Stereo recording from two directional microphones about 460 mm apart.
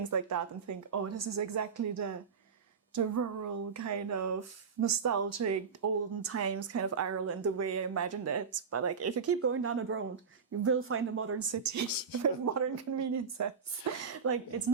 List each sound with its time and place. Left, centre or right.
0.0 s speech: right